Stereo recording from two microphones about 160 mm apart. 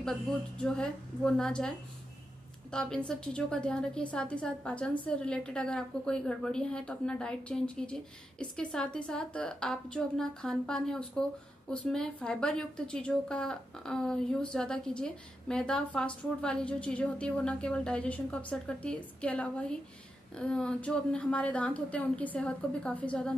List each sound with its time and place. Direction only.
0.0 s a woman's voice: 5° left (ahead or behind)